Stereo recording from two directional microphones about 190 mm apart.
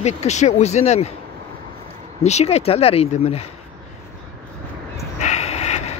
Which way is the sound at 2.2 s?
35° left (ahead or behind).